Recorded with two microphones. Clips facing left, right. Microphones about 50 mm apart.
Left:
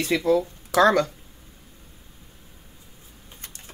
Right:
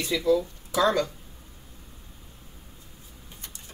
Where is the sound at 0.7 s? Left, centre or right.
Left.